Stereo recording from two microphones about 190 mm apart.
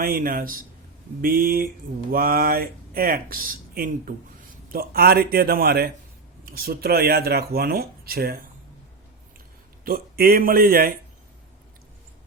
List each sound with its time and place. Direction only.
0.0 s speech: 50° right (ahead or behind)
9.8 s speech: 50° right (ahead or behind)